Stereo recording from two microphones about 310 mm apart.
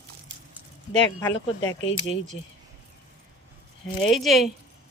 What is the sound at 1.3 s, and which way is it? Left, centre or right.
Speech, left.